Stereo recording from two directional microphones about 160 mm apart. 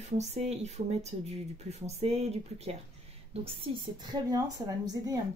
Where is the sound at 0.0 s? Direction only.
45° right (ahead or behind).